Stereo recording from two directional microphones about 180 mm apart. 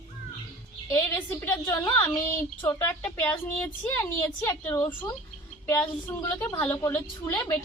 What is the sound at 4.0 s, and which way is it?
A woman's voice, 10° left (ahead or behind).